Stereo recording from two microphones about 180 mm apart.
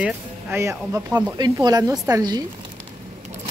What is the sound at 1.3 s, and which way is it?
Speech, 20° right (ahead or behind).